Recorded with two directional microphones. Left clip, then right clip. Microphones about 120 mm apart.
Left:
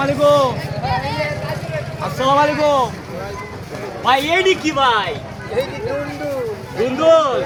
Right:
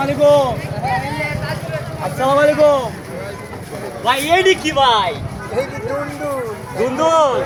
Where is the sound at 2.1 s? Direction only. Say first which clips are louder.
Right 2 dB; 30° left (ahead or behind).